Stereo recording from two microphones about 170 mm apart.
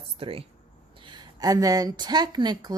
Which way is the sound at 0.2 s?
35° right (ahead or behind).